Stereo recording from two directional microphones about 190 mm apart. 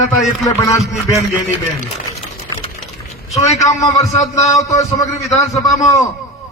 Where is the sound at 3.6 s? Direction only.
15° left (ahead or behind).